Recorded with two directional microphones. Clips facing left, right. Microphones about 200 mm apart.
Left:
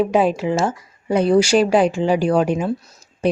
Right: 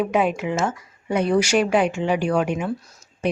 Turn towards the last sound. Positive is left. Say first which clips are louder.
# left 5 dB
turn(degrees=35)  # may be behind; listen again after turning